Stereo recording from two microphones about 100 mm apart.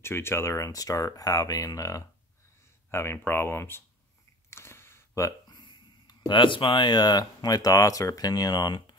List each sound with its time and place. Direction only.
0.0 s speech: 25° left (ahead or behind)
4.5 s a sound: 25° left (ahead or behind)
5.5 s speech: 50° left (ahead or behind)